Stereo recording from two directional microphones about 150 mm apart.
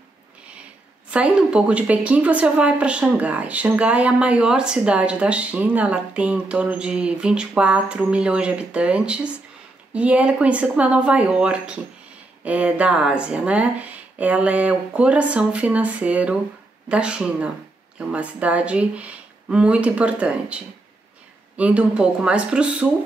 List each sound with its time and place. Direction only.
1.1 s a woman's voice: 5° right (ahead or behind)